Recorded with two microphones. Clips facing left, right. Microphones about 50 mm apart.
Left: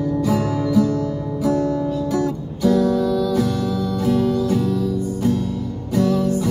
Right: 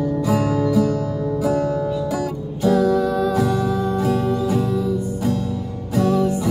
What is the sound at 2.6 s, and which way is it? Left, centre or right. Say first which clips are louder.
Music: even; right.